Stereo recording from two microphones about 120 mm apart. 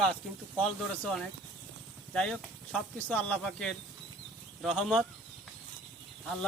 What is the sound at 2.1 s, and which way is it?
Speech, 5° left (ahead or behind).